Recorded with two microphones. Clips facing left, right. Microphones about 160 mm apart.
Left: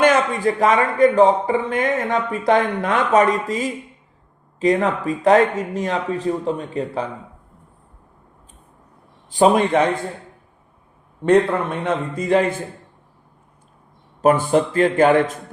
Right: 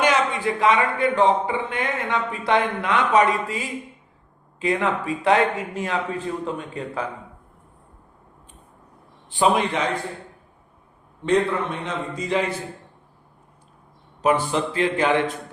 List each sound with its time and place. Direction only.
0.0 s a man's voice: 45° left (ahead or behind)
9.3 s a man's voice: 45° left (ahead or behind)
11.2 s a man's voice: 55° left (ahead or behind)
14.2 s a man's voice: 45° left (ahead or behind)